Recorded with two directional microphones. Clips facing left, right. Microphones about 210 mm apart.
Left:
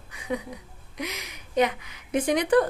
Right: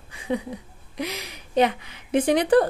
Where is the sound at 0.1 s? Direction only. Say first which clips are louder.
Right 4 dB; 30° right (ahead or behind).